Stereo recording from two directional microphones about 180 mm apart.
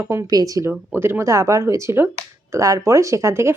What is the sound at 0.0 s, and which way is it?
Speech, 15° right (ahead or behind).